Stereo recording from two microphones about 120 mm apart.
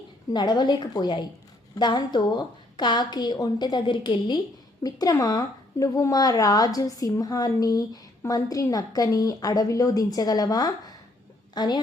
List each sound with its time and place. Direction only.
0.3 s speech: 35° left (ahead or behind)
4.8 s speech: 30° left (ahead or behind)